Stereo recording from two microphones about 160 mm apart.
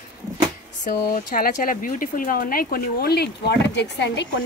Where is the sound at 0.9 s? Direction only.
70° left (ahead or behind); by 4.3 s 90° left.